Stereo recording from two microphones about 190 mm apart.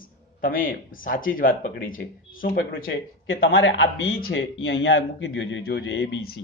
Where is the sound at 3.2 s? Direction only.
90° left; by 6.3 s 75° left (ahead or behind).